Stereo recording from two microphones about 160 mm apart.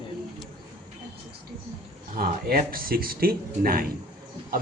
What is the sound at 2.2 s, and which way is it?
Speech, 65° right (ahead or behind).